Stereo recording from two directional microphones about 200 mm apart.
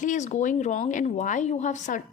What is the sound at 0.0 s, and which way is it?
A woman's voice, 35° left (ahead or behind).